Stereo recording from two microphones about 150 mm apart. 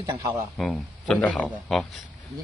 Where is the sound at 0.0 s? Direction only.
25° right (ahead or behind).